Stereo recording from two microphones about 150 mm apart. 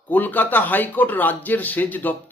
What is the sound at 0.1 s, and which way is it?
A man's voice, 10° left (ahead or behind).